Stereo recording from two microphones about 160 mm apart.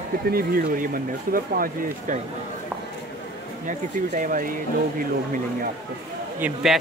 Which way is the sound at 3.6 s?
55° right (ahead or behind).